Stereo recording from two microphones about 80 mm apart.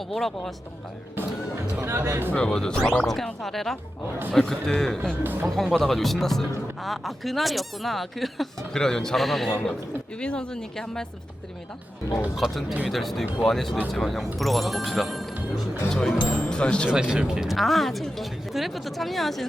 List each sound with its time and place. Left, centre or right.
0.1 s a man's voice: centre
1.8 s speech: right
2.3 s a man's voice: centre
5.2 s speech: right
5.5 s a man's voice: centre
12.4 s a man's voice: centre
16.9 s a man's voice: centre